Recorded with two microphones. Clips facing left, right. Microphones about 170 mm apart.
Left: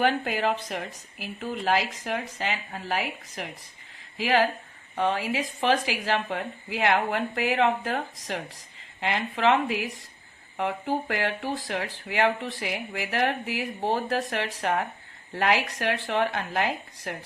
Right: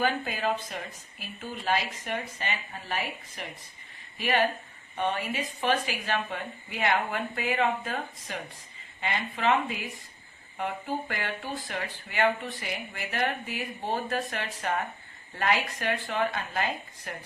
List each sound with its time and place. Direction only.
0.0 s a woman's voice: 75° left (ahead or behind)